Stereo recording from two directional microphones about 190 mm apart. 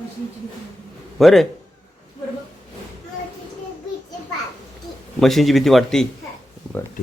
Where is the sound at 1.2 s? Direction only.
Centre (ahead or behind).